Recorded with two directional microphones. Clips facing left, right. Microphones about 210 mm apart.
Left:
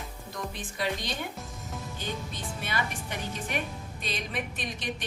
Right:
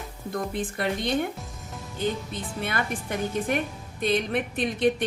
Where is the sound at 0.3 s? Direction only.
55° right (ahead or behind).